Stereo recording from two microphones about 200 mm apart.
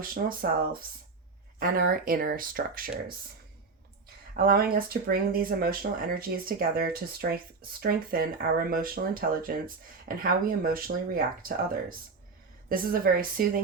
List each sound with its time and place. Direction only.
0.0 s speech: 45° right (ahead or behind)
4.4 s speech: 45° right (ahead or behind)